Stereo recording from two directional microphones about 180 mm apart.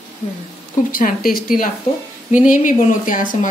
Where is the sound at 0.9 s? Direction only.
50° left (ahead or behind).